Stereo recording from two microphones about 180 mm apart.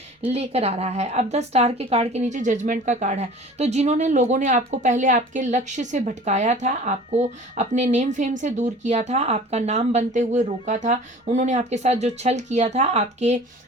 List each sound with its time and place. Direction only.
0.3 s speech: 35° right (ahead or behind)